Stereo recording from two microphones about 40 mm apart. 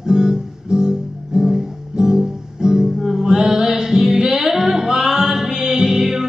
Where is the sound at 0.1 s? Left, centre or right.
Centre.